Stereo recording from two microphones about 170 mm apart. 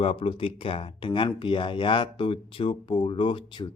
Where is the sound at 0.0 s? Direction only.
35° left (ahead or behind).